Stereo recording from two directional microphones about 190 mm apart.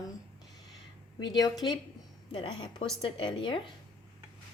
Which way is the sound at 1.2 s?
20° left (ahead or behind).